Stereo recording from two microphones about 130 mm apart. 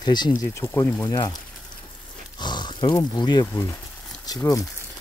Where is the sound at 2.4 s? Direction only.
35° left (ahead or behind).